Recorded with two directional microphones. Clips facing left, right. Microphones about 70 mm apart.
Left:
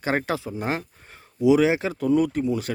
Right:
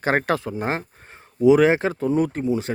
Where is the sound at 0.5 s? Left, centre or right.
Right.